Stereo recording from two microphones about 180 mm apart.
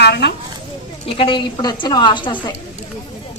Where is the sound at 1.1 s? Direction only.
30° left (ahead or behind).